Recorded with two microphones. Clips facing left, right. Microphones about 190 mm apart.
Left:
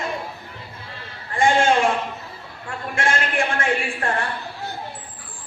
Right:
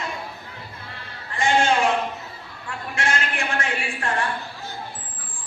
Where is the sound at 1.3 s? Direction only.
50° left (ahead or behind).